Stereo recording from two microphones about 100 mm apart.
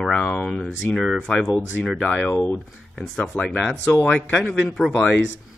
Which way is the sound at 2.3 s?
15° left (ahead or behind).